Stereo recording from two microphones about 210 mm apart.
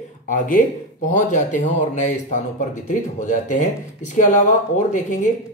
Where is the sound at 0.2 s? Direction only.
40° left (ahead or behind).